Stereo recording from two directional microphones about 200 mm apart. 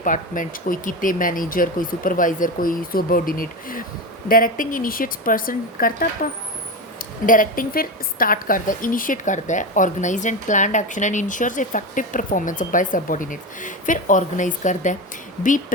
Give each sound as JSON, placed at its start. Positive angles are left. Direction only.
{"t": 0.0, "sound": "speech", "side_deg": 40}
{"t": 7.3, "sound": "a woman's voice", "side_deg": 45}